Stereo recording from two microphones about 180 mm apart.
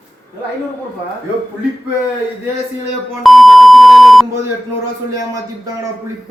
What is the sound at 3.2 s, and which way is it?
Beep, centre (ahead or behind).